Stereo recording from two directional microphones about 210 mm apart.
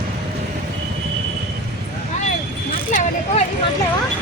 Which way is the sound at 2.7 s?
35° left (ahead or behind).